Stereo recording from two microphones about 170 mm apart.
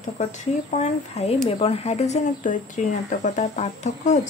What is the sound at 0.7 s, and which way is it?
A woman's voice, 40° left (ahead or behind).